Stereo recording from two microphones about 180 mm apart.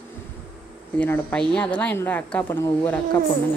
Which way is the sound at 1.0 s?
10° left (ahead or behind).